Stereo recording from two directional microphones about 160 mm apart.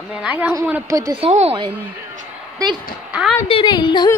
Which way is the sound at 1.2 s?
40° right (ahead or behind).